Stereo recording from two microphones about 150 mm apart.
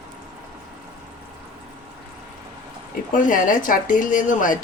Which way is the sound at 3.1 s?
60° left (ahead or behind).